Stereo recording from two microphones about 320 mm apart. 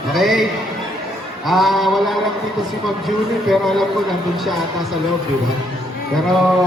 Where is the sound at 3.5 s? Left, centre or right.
Centre.